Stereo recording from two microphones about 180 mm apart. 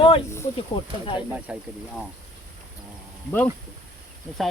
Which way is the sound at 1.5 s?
5° right (ahead or behind).